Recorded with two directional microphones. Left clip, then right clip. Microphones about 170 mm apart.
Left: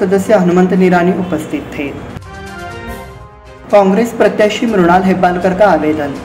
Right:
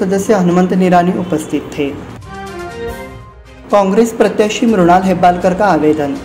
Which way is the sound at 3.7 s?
25° right (ahead or behind).